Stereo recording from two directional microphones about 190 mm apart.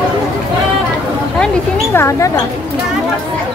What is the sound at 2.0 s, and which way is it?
Speech, 15° left (ahead or behind).